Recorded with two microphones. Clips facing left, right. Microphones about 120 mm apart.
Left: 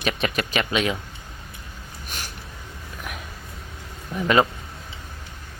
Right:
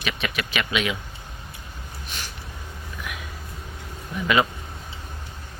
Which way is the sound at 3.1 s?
40° left (ahead or behind).